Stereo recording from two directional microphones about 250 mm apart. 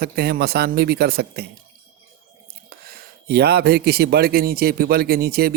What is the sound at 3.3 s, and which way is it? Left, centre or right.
Speech, right.